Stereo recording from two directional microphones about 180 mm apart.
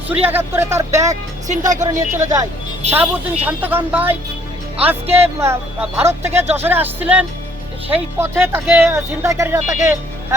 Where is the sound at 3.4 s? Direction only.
10° right (ahead or behind).